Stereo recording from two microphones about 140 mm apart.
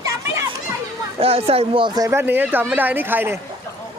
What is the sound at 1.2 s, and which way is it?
Speech, 45° right (ahead or behind).